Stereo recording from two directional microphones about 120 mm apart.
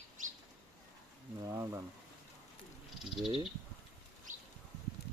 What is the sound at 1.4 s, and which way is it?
Speech, 25° right (ahead or behind).